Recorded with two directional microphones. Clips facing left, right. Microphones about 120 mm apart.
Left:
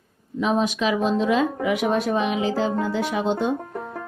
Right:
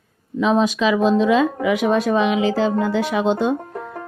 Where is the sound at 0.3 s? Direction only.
90° right.